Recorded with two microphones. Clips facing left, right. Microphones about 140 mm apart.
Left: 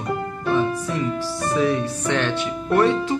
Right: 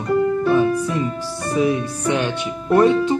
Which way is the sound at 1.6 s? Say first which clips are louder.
Right 3 dB; 15° right (ahead or behind).